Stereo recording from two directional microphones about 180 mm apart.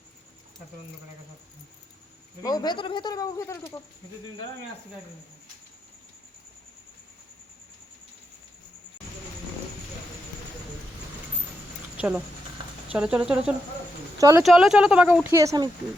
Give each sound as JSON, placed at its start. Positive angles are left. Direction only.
{"t": 2.4, "sound": "speech", "side_deg": 20}
{"t": 12.9, "sound": "speech", "side_deg": -5}
{"t": 14.2, "sound": "speech", "side_deg": -20}
{"t": 14.4, "sound": "speech", "side_deg": -5}